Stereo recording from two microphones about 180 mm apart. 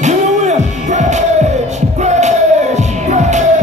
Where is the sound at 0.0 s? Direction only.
40° right (ahead or behind).